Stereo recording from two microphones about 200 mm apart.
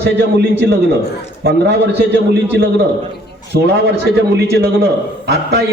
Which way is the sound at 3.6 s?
55° right (ahead or behind).